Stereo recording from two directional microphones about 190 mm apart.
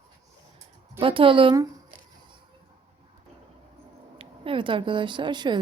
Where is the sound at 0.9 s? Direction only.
30° right (ahead or behind).